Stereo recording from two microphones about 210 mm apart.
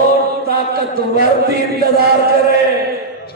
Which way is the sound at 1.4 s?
50° right (ahead or behind).